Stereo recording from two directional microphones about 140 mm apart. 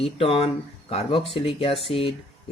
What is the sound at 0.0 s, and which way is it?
Speech, 40° left (ahead or behind).